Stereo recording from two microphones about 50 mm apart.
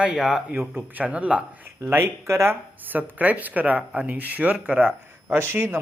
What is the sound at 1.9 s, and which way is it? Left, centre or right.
Speech, right.